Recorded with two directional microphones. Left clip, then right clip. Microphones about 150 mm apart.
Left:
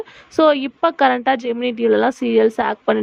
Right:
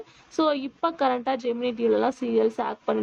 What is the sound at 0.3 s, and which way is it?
Speech, 45° left (ahead or behind).